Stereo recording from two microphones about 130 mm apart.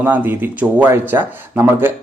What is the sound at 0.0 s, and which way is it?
Speech, 15° right (ahead or behind).